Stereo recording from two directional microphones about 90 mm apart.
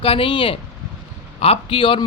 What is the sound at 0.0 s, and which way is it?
A man's voice, 85° left.